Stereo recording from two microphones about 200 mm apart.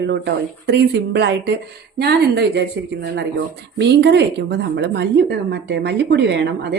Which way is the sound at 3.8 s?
60° right (ahead or behind).